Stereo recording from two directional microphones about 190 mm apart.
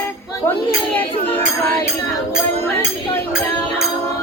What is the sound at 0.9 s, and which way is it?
Speech, 10° left (ahead or behind).